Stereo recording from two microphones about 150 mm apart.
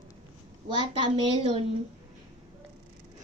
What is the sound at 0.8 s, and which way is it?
Speech, 35° right (ahead or behind).